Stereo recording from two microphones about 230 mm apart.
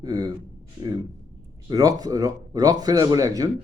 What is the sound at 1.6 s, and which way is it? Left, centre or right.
Speech, centre.